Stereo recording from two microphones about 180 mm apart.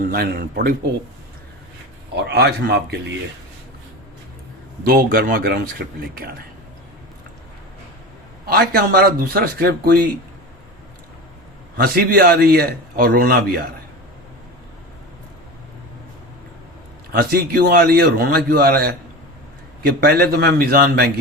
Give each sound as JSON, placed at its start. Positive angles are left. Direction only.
{"t": 0.1, "sound": "a man's voice", "side_deg": -55}
{"t": 2.1, "sound": "a man's voice", "side_deg": -65}
{"t": 4.9, "sound": "speech", "side_deg": -55}
{"t": 8.4, "sound": "a man's voice", "side_deg": -55}
{"t": 11.8, "sound": "a man's voice", "side_deg": -60}
{"t": 17.1, "sound": "a man's voice", "side_deg": -55}